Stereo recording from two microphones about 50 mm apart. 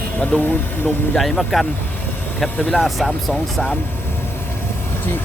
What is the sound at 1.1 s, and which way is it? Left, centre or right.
Speech, centre.